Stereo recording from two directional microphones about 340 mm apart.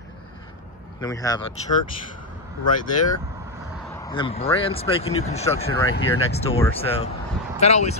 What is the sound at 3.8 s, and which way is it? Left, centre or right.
Speech, centre.